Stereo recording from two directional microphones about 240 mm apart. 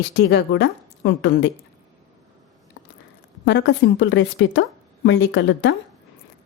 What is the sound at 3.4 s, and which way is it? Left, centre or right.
Speech, left.